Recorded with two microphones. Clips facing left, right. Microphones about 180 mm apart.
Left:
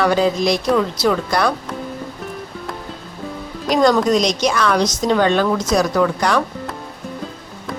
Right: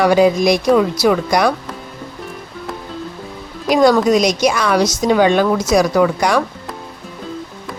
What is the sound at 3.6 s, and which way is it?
A woman's voice, 10° right (ahead or behind).